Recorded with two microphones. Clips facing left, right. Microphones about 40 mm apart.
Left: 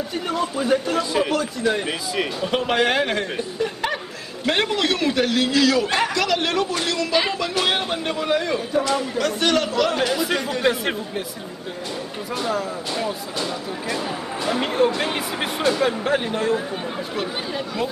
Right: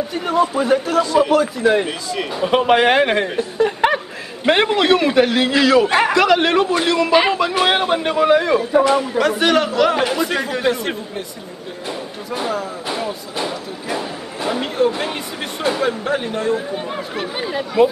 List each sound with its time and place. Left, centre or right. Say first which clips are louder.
0.3 s speech: right 6 dB; centre
1.9 s a man's voice: right 1 dB; centre
2.4 s a man's voice: right 8 dB; centre
8.5 s speech: right 7 dB; right; by 11.0 s centre
12.9 s speech: right 2 dB; centre
15.0 s speech: even; centre
17.2 s speech: right 4 dB; centre